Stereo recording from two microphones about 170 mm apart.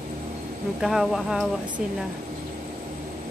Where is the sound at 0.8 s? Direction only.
Centre (ahead or behind).